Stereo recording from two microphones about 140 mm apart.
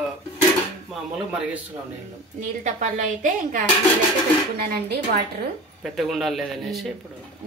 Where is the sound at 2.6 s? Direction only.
60° right (ahead or behind).